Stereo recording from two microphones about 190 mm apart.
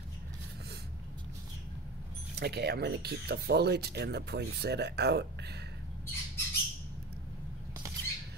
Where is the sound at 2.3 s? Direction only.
60° right (ahead or behind).